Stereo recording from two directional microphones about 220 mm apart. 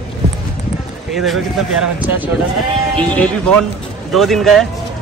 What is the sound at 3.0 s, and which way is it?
Speech, 5° left (ahead or behind).